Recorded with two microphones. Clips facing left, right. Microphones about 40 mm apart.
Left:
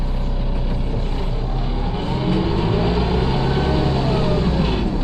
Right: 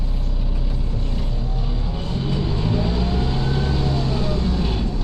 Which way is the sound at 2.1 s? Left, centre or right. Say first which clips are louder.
Left 5 dB; left.